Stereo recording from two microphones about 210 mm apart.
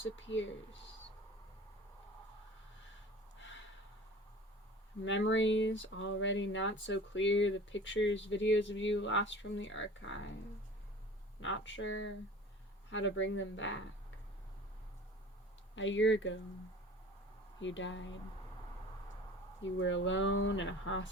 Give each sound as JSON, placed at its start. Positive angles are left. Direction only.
{"t": 0.0, "sound": "speech", "side_deg": 65}
{"t": 5.0, "sound": "speech", "side_deg": 60}
{"t": 11.3, "sound": "speech", "side_deg": 60}
{"t": 15.7, "sound": "speech", "side_deg": 60}
{"t": 17.6, "sound": "speech", "side_deg": 60}
{"t": 19.6, "sound": "speech", "side_deg": 65}